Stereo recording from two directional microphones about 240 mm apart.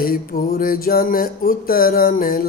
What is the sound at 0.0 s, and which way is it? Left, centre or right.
Mantra, left.